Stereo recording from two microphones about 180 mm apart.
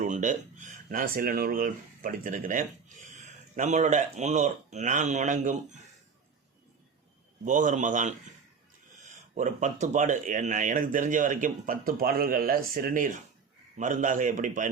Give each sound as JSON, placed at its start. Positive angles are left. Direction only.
{"t": 0.0, "sound": "speech", "side_deg": -45}
{"t": 7.4, "sound": "speech", "side_deg": -45}
{"t": 9.3, "sound": "speech", "side_deg": -45}